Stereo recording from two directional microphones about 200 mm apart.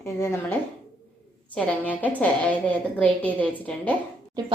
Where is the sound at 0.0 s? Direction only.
15° left (ahead or behind).